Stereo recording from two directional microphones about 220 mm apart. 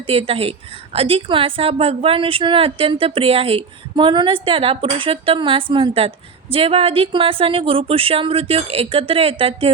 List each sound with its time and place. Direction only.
0.1 s a woman's voice: 25° right (ahead or behind)